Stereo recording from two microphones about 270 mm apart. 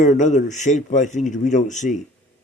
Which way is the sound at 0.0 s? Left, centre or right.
Left.